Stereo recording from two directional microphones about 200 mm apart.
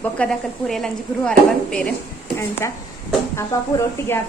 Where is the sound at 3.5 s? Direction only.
15° left (ahead or behind).